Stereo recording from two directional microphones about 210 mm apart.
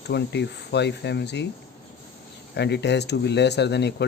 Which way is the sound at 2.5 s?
55° left (ahead or behind).